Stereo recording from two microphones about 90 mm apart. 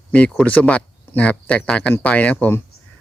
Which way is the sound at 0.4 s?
15° left (ahead or behind).